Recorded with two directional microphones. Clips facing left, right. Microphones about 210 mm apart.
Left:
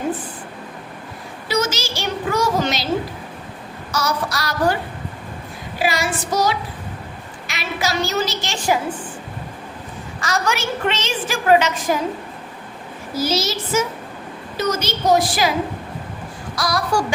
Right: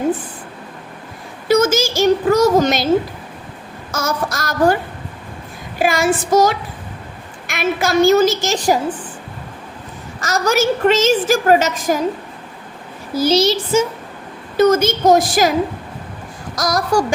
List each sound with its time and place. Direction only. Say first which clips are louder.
1.5 s a woman's voice: right 8 dB; 50° right (ahead or behind)
3.9 s a woman's voice: right 2 dB; 45° right (ahead or behind)
5.8 s a woman's voice: right 6 dB; 50° right (ahead or behind)
10.2 s a woman's voice: right 6 dB; 40° right (ahead or behind)
13.2 s a child's voice: right 8 dB; 30° right (ahead or behind)
14.5 s a woman's voice: right 10 dB; 50° right (ahead or behind)
16.6 s a woman's voice: right 4 dB; 45° right (ahead or behind)